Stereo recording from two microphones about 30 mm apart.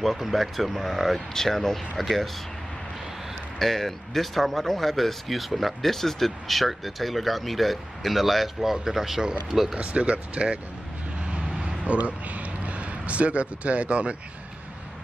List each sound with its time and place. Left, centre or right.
0.0 s speech: centre
1.3 s speech: centre
3.5 s speech: centre
9.8 s speech: right
11.2 s vehicle: right
12.0 s a man's voice: right